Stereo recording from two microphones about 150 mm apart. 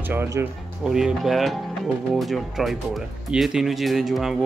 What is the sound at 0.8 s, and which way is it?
A man's voice, 5° right (ahead or behind).